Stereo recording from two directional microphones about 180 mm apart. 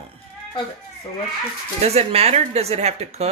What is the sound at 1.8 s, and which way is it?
A woman's voice, 35° right (ahead or behind).